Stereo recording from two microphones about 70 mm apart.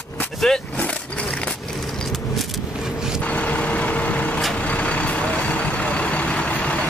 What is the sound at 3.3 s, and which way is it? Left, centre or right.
Vehicle, centre.